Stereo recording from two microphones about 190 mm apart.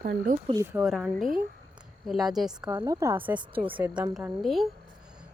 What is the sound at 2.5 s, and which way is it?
A woman's voice, 20° right (ahead or behind).